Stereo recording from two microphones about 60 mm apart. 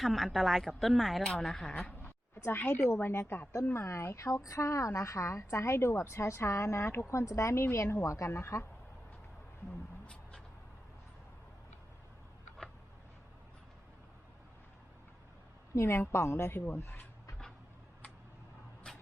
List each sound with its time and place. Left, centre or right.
0.0 s a woman's voice: centre
1.2 s speech: centre
1.8 s sheep: left
2.9 s a woman's voice: left
3.8 s a woman's voice: left
7.6 s a woman's voice: left
15.7 s a woman's voice: left